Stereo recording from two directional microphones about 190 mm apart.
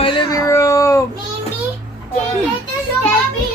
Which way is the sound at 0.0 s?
25° left (ahead or behind).